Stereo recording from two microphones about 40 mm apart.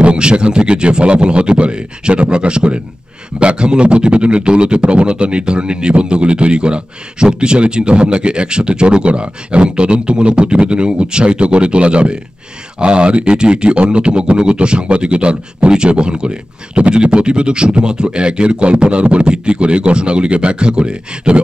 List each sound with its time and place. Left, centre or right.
0.0 s speech: right